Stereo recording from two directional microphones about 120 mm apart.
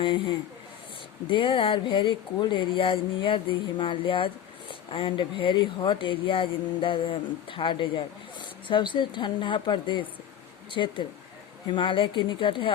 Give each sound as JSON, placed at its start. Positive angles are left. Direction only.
{"t": 0.0, "sound": "speech", "side_deg": 45}